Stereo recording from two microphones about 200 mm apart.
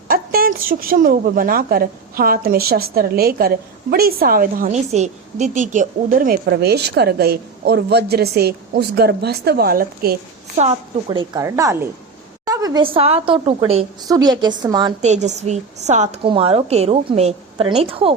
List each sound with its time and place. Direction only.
0.1 s a woman's voice: 45° right (ahead or behind)
10.6 s a woman's voice: 30° right (ahead or behind)
15.0 s a woman's voice: 35° right (ahead or behind)